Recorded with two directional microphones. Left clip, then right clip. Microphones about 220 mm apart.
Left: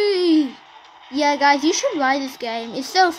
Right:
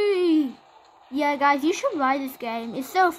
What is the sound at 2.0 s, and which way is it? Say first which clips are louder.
Speech: left 4 dB; 40° right (ahead or behind).